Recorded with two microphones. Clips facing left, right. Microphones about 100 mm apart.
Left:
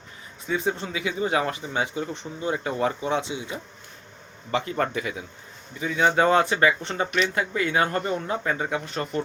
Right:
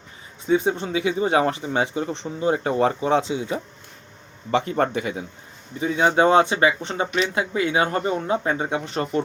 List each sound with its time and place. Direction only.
0.4 s speech: 25° right (ahead or behind)